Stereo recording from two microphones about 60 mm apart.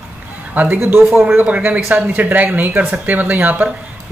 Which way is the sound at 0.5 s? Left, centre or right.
Right.